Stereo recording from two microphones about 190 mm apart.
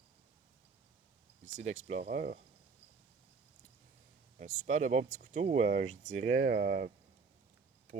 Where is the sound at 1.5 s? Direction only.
40° right (ahead or behind).